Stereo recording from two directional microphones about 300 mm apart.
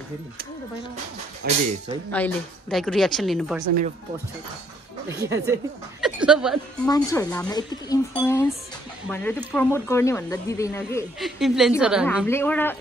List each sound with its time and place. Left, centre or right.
1.4 s speech: right
2.0 s a woman's voice: centre
5.5 s speech: centre
6.9 s a woman's voice: centre